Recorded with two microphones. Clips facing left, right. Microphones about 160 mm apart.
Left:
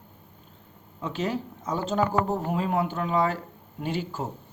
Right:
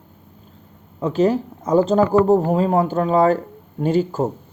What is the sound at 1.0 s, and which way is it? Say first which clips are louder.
Speech: right 11 dB; 40° right (ahead or behind).